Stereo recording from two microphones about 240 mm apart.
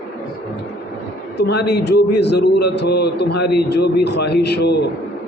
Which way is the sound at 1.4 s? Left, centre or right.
Left.